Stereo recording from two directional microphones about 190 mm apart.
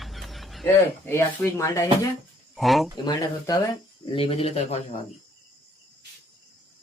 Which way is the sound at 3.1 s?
20° left (ahead or behind).